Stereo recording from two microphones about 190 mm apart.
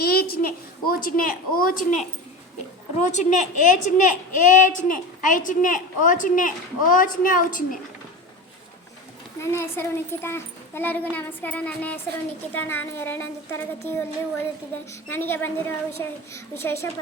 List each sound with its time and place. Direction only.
0.0 s a woman's voice: 55° left (ahead or behind)
9.4 s a child's voice: 15° left (ahead or behind)
15.1 s a child's voice: 10° left (ahead or behind)